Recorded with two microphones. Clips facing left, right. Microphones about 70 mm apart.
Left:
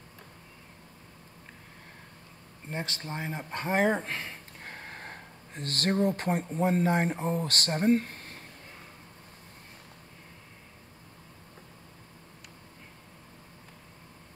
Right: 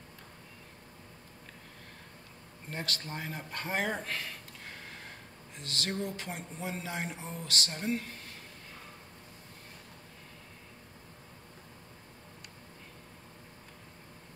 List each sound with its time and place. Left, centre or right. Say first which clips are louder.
2.7 s speech: left 3 dB; left